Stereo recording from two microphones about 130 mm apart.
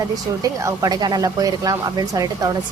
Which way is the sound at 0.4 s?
25° right (ahead or behind).